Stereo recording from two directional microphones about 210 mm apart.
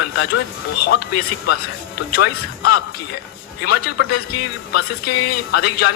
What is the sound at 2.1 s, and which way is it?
A man's voice, 45° left (ahead or behind).